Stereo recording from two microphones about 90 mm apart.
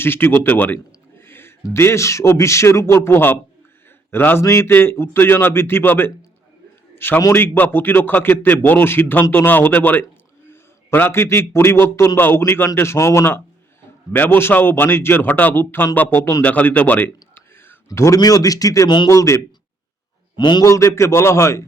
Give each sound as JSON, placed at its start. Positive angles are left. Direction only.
{"t": 0.0, "sound": "a man's voice", "side_deg": 25}
{"t": 20.3, "sound": "a man's voice", "side_deg": 55}
{"t": 20.7, "sound": "a man's voice", "side_deg": 35}